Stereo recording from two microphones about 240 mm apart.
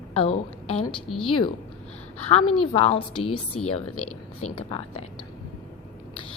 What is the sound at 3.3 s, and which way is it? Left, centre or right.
A woman's voice, left.